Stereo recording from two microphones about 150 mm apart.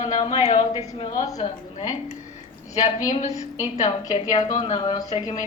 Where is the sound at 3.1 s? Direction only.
50° left (ahead or behind).